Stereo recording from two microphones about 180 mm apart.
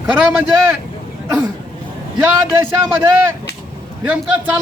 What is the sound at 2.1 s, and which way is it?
Speech, 10° right (ahead or behind).